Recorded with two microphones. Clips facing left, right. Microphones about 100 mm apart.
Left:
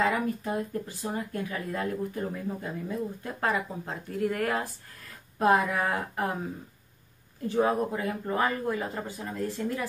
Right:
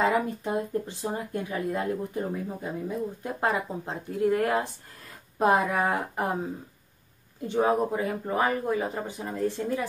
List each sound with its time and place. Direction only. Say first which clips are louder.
0.0 s speech: right 2 dB; 25° right (ahead or behind)
7.4 s speech: right 2 dB; 20° right (ahead or behind)